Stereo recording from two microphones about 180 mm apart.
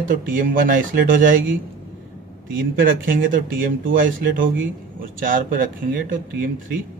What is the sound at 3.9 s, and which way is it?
Speech, 50° right (ahead or behind).